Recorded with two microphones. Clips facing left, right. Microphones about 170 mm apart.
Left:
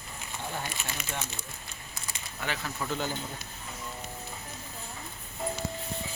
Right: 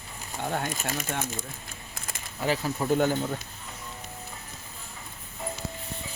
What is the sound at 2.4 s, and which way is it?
Speech, 35° right (ahead or behind).